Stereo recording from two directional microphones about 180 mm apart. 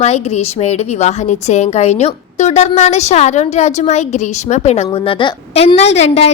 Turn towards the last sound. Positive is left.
turn(degrees=35)  # may be behind; listen again after turning